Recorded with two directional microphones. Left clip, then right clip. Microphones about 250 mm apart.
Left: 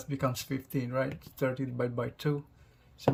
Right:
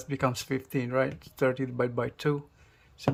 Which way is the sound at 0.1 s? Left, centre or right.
Centre.